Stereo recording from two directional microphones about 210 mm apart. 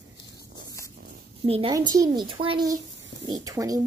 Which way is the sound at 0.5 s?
15° left (ahead or behind).